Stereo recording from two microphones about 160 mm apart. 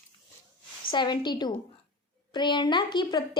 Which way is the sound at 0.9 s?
30° left (ahead or behind).